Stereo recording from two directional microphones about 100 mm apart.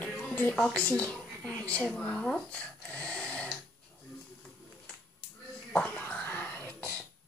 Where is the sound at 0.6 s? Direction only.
15° left (ahead or behind).